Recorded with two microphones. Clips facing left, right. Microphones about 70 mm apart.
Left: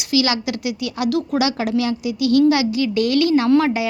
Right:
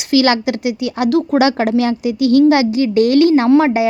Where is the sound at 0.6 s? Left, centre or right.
Right.